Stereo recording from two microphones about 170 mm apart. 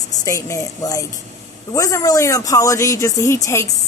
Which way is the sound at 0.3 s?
20° left (ahead or behind).